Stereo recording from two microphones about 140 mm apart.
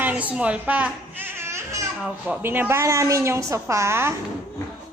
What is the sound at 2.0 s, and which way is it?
A woman's voice, 10° right (ahead or behind).